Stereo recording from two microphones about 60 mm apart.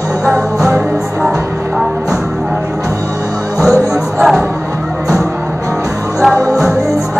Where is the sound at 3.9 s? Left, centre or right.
Centre.